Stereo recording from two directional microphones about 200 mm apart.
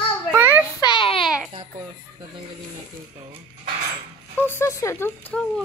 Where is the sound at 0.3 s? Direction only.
10° right (ahead or behind).